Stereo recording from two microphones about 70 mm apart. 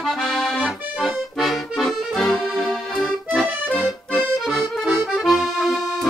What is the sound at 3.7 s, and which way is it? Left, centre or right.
Accordion, centre.